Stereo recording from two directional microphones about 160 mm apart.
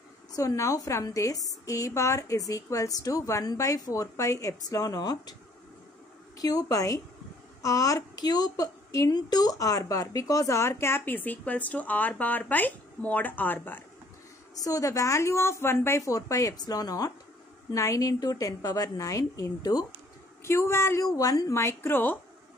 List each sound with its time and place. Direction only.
0.4 s a woman's voice: 20° left (ahead or behind)
6.3 s a woman's voice: 20° left (ahead or behind)